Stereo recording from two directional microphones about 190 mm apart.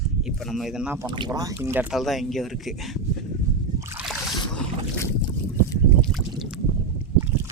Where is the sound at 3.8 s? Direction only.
15° right (ahead or behind).